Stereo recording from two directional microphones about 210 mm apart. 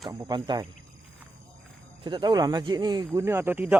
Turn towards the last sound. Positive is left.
turn(degrees=-10)  # may be behind; listen again after turning